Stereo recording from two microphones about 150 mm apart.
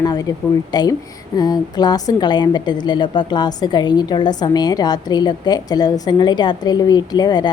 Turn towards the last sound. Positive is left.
turn(degrees=30)  # may be behind; listen again after turning